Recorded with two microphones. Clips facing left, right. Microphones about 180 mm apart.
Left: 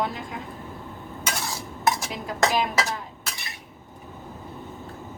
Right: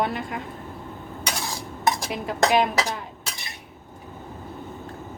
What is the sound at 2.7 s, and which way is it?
Dishes, centre (ahead or behind).